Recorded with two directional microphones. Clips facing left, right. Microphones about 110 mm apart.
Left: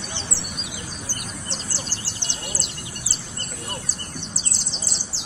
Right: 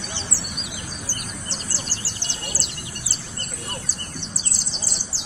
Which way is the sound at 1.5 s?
20° left (ahead or behind).